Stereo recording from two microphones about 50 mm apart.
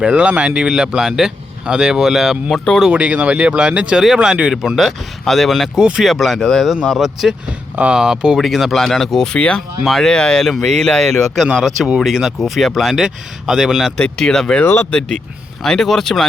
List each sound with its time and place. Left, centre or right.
0.0 s speech: right
2.9 s speech: right
4.0 s speech: centre
4.8 s speech: centre
5.7 s speech: centre
6.1 s speech: centre
7.0 s speech: centre
8.4 s speech: centre
10.1 s speech: centre
10.4 s speech: centre
13.9 s speech: centre
14.6 s speech: left
15.6 s speech: centre